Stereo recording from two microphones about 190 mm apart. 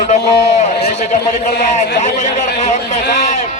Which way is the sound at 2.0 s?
35° left (ahead or behind).